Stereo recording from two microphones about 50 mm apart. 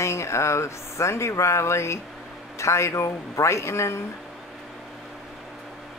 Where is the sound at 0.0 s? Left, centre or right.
Left.